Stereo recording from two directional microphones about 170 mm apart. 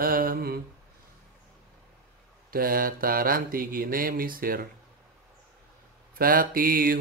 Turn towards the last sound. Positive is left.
turn(degrees=-60)  # may be behind; listen again after turning